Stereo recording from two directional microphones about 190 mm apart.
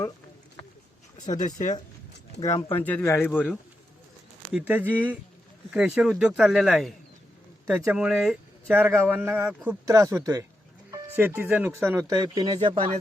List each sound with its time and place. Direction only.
1.4 s speech: 40° left (ahead or behind)
2.3 s speech: 65° left (ahead or behind)
2.7 s speech: 10° left (ahead or behind)
4.5 s speech: 10° right (ahead or behind); by 13.0 s 30° right (ahead or behind)